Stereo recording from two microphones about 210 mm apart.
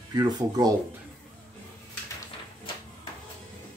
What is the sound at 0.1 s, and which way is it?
Speech, 20° right (ahead or behind).